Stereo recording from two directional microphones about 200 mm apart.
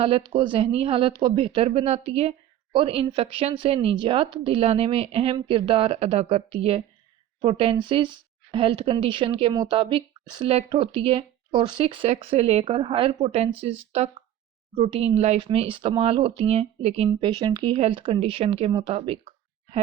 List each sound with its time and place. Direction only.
0.0 s a woman's voice: 25° right (ahead or behind)